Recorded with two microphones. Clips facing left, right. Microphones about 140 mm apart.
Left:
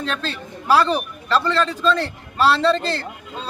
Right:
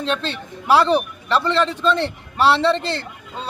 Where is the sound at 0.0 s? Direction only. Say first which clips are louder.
Right 3 dB; 25° right (ahead or behind).